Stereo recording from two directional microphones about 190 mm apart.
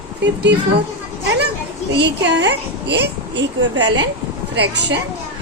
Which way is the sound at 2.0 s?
65° right (ahead or behind).